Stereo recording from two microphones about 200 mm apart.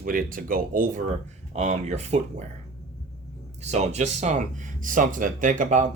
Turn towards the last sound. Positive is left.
turn(degrees=-40)  # may be behind; listen again after turning